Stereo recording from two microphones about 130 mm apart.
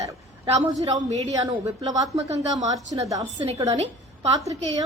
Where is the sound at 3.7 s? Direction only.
55° right (ahead or behind).